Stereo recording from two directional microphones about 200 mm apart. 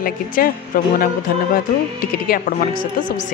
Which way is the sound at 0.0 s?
45° left (ahead or behind).